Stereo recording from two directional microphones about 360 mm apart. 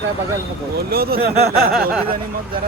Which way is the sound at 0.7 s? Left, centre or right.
Right.